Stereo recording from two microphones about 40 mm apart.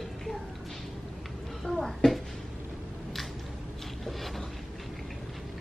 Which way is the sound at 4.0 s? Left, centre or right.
Centre.